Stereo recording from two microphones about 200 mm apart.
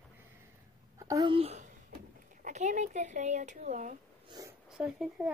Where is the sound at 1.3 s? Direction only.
30° right (ahead or behind).